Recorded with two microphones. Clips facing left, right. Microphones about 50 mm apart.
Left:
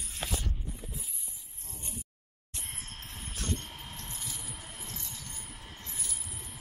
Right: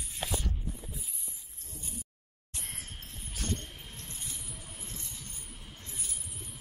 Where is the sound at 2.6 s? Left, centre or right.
Left.